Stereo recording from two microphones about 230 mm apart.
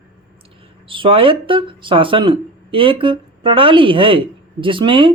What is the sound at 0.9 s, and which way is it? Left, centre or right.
Speech, right.